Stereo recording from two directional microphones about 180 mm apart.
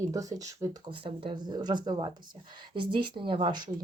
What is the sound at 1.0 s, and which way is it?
Speech, 30° right (ahead or behind).